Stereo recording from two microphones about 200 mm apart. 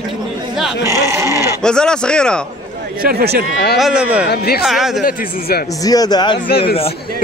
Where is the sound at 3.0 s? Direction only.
50° right (ahead or behind).